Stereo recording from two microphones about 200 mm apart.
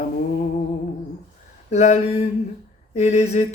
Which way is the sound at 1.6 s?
35° left (ahead or behind).